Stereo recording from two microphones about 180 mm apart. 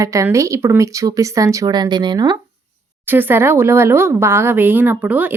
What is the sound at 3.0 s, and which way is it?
Speech, 10° right (ahead or behind).